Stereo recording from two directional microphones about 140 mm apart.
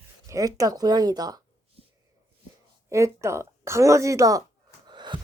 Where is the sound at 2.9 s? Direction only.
20° right (ahead or behind).